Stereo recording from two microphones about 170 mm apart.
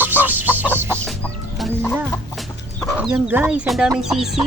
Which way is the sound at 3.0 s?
10° right (ahead or behind).